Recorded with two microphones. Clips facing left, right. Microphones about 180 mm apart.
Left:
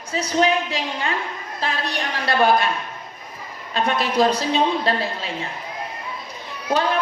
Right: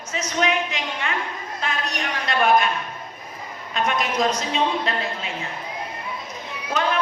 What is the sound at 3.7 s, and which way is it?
A woman's voice, 35° left (ahead or behind).